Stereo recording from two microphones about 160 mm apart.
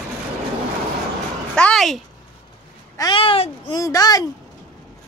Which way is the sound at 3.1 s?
35° left (ahead or behind).